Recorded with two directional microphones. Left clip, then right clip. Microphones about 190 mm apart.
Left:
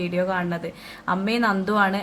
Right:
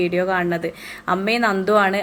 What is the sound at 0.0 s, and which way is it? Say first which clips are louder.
A woman's voice: right 5 dB; 10° right (ahead or behind).